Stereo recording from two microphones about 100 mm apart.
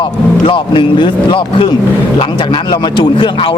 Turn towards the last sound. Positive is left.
turn(degrees=60)  # may be behind; listen again after turning